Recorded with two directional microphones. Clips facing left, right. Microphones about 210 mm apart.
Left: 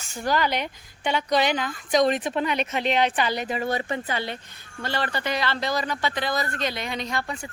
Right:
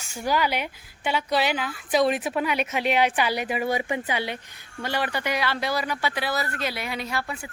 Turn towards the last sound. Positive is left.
turn(degrees=-5)  # may be behind; listen again after turning